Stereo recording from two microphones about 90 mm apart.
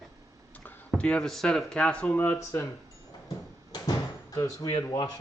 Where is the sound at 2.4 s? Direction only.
35° left (ahead or behind).